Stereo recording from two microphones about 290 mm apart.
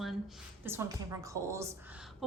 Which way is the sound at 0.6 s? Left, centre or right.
Centre.